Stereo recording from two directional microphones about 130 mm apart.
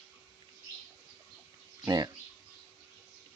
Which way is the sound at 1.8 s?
30° right (ahead or behind).